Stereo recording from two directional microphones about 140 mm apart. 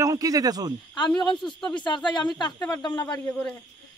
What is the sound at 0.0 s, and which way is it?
Speech, 25° right (ahead or behind).